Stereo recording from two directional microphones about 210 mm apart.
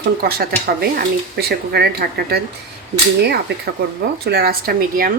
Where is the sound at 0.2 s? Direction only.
45° right (ahead or behind).